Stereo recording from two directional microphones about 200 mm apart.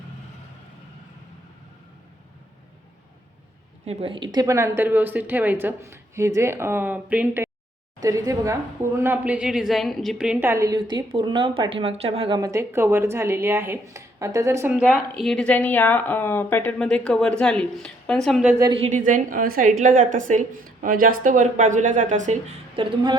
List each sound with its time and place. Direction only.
3.8 s a woman's voice: 25° right (ahead or behind)
12.4 s a woman's voice: 15° right (ahead or behind)
15.2 s speech: 5° left (ahead or behind)
18.6 s a woman's voice: 25° right (ahead or behind)
18.9 s speech: 40° right (ahead or behind)